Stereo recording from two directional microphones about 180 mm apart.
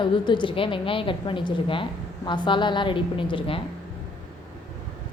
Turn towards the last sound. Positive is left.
turn(degrees=30)  # may be behind; listen again after turning